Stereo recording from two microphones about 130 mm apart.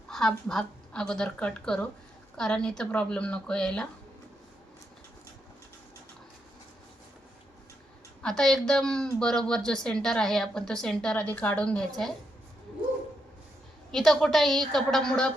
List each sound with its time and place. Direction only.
0.1 s a woman's voice: 5° left (ahead or behind)
8.2 s a woman's voice: 5° left (ahead or behind)
13.9 s a woman's voice: centre (ahead or behind)